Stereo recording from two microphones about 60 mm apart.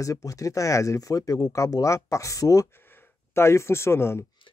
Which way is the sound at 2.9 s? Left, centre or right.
Left.